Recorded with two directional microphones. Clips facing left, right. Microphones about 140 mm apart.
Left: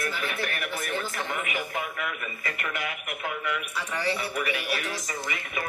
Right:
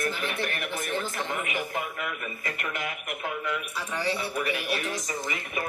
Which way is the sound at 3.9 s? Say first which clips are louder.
Even; 20° right (ahead or behind).